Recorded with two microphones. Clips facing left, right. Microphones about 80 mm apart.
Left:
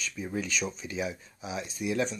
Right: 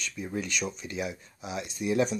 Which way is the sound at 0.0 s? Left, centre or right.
Centre.